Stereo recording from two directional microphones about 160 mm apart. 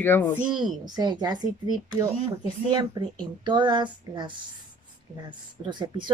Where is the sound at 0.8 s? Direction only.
25° right (ahead or behind).